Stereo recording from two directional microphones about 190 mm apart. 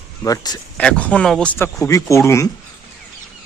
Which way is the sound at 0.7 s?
5° left (ahead or behind).